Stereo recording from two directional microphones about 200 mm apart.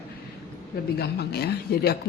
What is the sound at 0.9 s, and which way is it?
Speech, 50° left (ahead or behind).